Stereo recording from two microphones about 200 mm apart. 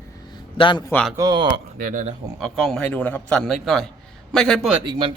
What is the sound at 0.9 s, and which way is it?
Speech, 5° left (ahead or behind).